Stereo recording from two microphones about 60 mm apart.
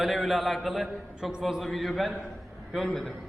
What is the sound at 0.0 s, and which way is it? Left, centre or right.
A man's voice, centre.